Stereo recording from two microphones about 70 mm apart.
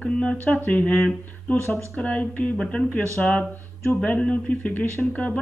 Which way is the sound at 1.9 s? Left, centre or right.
Centre.